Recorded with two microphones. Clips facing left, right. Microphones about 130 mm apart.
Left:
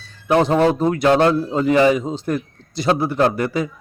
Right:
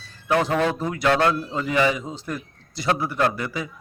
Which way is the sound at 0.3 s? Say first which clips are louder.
Left 6 dB; 25° left (ahead or behind).